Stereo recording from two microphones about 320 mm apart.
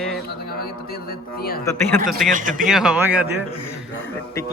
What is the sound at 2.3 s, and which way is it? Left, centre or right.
Speech, right.